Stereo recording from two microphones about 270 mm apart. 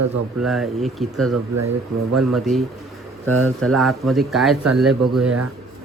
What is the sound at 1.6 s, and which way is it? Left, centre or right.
Speech, right.